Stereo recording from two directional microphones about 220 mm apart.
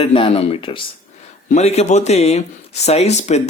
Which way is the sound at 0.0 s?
25° left (ahead or behind).